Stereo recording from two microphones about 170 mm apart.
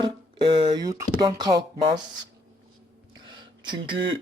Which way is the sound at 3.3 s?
25° right (ahead or behind).